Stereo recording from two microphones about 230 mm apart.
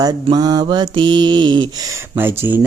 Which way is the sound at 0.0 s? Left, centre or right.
Centre.